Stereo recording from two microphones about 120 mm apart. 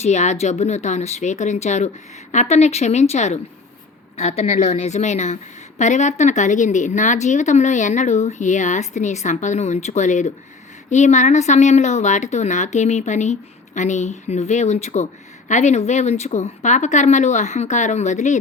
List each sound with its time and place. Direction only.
0.0 s speech: 75° left (ahead or behind)
4.2 s a woman's voice: 60° left (ahead or behind); by 18.3 s 80° left